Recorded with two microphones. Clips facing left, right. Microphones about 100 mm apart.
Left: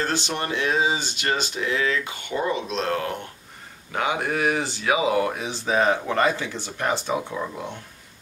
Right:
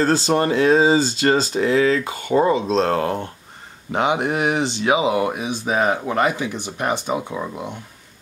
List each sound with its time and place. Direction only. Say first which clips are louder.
0.0 s speech: right 9 dB; 35° right (ahead or behind)
3.9 s speech: right 5 dB; 20° right (ahead or behind)